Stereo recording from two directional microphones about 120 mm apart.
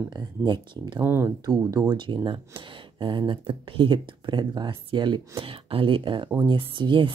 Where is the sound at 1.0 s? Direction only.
20° right (ahead or behind).